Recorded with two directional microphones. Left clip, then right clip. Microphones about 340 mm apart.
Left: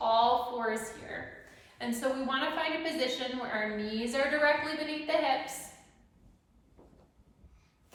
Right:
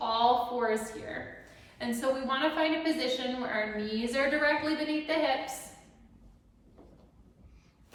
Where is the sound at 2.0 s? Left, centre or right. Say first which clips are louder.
Right 2 dB; centre.